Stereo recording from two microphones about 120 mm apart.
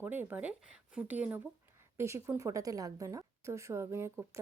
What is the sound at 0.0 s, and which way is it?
A woman's voice, 15° right (ahead or behind).